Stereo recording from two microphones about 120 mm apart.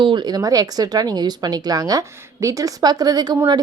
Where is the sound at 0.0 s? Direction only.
40° right (ahead or behind).